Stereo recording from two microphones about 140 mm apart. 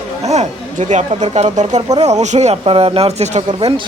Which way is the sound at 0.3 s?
55° right (ahead or behind).